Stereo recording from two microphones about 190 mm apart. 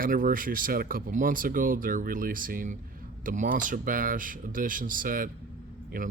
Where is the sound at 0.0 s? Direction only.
50° right (ahead or behind).